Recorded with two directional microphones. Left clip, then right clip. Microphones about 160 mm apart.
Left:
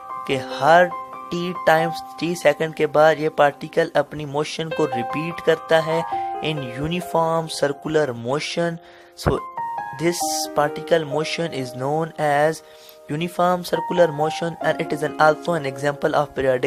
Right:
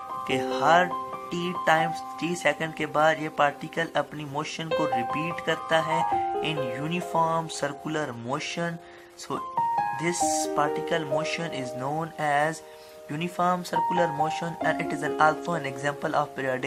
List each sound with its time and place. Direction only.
0.3 s speech: 50° left (ahead or behind)
6.0 s speech: 5° left (ahead or behind)
6.7 s speech: 50° left (ahead or behind)
10.2 s speech: 20° left (ahead or behind)
10.4 s speech: 50° left (ahead or behind)